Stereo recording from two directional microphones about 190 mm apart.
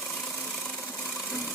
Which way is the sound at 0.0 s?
5° left (ahead or behind).